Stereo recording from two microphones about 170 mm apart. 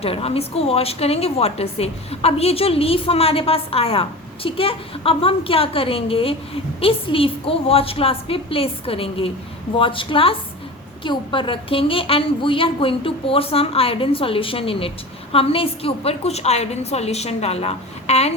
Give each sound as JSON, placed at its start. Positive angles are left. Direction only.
{"t": 0.0, "sound": "a woman's voice", "side_deg": 35}